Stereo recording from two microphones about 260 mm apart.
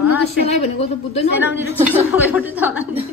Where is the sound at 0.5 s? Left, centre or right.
Left.